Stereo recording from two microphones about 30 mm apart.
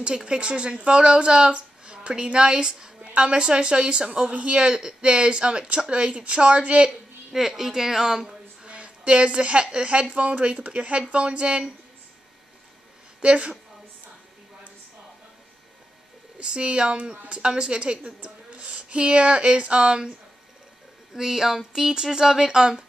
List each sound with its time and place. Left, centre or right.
0.0 s a woman's voice: right
7.3 s speech: centre
8.6 s a sound: right
9.8 s a woman's voice: right
13.2 s a woman's voice: right
16.3 s a woman's voice: right
21.1 s speech: centre
22.5 s speech: right